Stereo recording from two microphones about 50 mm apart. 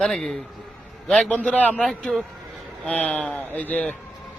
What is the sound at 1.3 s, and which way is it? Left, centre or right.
Speech, left.